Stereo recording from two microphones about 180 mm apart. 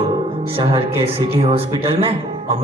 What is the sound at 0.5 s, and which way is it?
A man's voice, 30° right (ahead or behind).